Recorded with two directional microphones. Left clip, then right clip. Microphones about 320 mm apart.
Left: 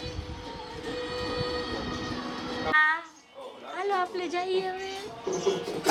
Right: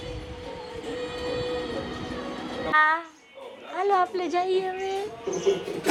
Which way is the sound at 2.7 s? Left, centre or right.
Centre.